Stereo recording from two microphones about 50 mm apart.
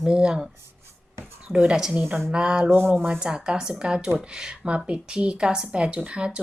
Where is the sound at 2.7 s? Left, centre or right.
Right.